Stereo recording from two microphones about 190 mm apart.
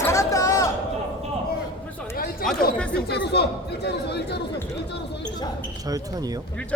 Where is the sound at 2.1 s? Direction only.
50° left (ahead or behind).